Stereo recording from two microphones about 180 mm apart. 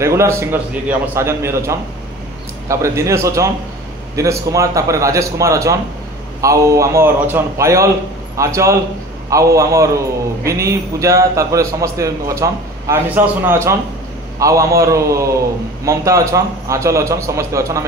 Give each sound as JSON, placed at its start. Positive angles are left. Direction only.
{"t": 0.0, "sound": "a man's voice", "side_deg": -15}